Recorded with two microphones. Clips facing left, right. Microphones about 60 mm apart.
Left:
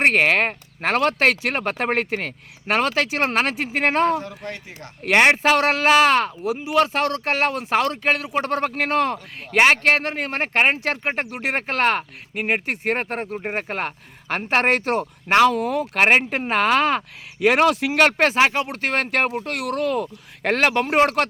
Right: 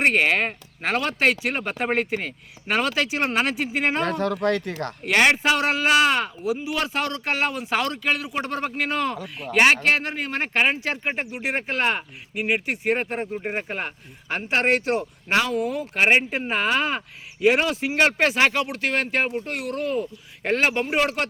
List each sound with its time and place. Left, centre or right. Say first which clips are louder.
0.0 s speech: left 3 dB; left
4.2 s speech: right 10 dB; right
5.0 s speech: left 3 dB; left
5.4 s speech: left 3 dB; left
6.8 s speech: left 4 dB; left
8.4 s speech: left 4 dB; left
15.4 s speech: left 5 dB; left
18.3 s speech: left 2 dB; left
18.7 s speech: left 1 dB; left
19.1 s speech: left 2 dB; left